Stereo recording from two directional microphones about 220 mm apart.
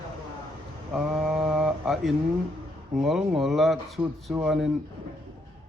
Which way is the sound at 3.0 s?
Centre (ahead or behind).